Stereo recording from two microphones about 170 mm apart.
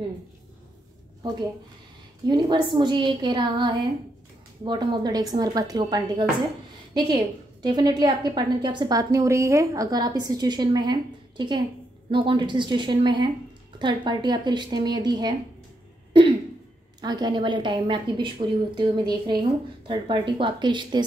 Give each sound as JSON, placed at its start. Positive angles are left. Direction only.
{"t": 2.2, "sound": "a woman's voice", "side_deg": -25}
{"t": 16.1, "sound": "throat clearing", "side_deg": -30}
{"t": 17.0, "sound": "a woman's voice", "side_deg": -25}